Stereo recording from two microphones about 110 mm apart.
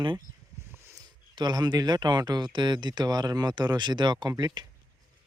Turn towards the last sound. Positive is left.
turn(degrees=-40)  # may be behind; listen again after turning